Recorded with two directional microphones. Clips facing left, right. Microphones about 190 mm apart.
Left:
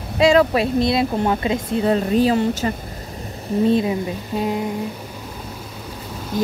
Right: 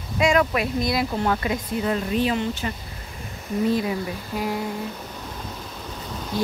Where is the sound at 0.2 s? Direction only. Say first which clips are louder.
Left 6 dB; 30° left (ahead or behind).